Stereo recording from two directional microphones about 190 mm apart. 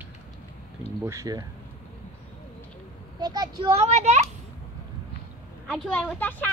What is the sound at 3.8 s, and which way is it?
Speech, 35° right (ahead or behind).